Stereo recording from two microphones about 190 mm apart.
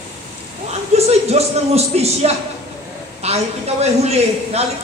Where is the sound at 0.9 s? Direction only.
35° right (ahead or behind).